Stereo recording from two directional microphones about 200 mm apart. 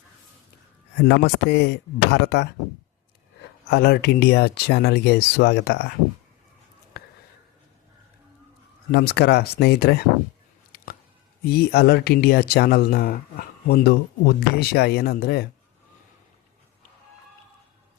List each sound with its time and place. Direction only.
0.9 s speech: 55° left (ahead or behind)
3.7 s speech: 50° left (ahead or behind)
7.0 s a sound: 50° left (ahead or behind)
8.9 s speech: 55° left (ahead or behind)
11.4 s speech: 50° left (ahead or behind)